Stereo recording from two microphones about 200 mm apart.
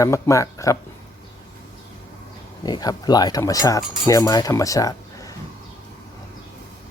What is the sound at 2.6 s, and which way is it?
Speech, 20° left (ahead or behind).